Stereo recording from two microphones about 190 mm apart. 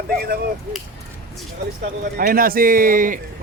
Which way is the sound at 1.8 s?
50° right (ahead or behind).